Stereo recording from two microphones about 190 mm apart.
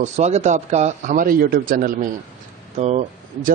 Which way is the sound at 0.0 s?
35° right (ahead or behind).